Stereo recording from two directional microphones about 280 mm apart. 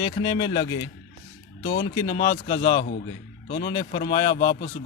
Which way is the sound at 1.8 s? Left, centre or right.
Centre.